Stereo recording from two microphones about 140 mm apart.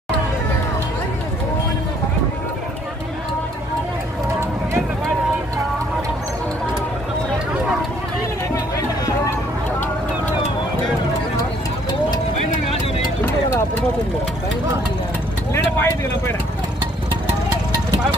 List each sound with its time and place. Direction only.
8.7 s music: 25° left (ahead or behind)
15.5 s vehicle: 15° left (ahead or behind)